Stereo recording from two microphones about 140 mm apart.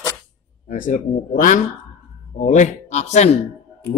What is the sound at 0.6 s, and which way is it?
Speech, 70° left (ahead or behind).